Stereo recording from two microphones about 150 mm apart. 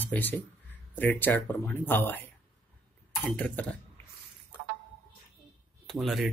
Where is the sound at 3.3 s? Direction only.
10° left (ahead or behind).